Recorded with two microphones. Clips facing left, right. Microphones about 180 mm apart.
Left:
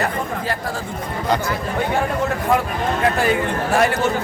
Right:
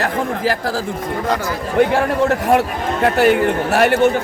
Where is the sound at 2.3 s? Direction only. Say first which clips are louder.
Right 4 dB; 80° right.